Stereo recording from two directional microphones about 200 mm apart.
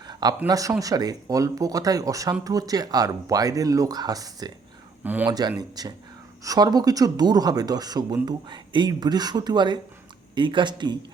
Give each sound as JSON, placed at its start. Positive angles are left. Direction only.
{"t": 0.0, "sound": "a sound", "side_deg": -20}
{"t": 0.4, "sound": "speech", "side_deg": -15}
{"t": 5.0, "sound": "speech", "side_deg": -10}
{"t": 5.3, "sound": "speech", "side_deg": -20}